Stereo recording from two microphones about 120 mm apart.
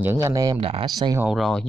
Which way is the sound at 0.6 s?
50° right (ahead or behind).